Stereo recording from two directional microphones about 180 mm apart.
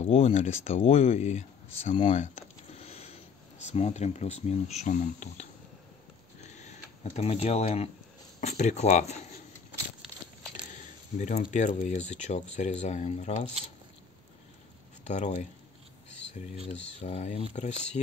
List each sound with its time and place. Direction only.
0.0 s speech: 35° left (ahead or behind)
6.5 s speech: 40° left (ahead or behind)
11.1 s speech: 40° left (ahead or behind)
15.0 s speech: 40° left (ahead or behind)
17.0 s speech: 40° left (ahead or behind)